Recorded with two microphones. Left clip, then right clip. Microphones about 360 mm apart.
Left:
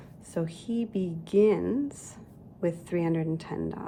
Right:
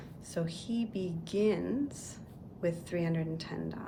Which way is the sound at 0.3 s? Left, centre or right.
Centre.